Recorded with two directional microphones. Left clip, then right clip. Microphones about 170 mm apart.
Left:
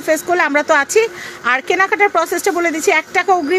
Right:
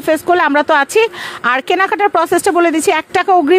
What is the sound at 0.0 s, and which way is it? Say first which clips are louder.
Speech: right 3 dB; 50° right (ahead or behind).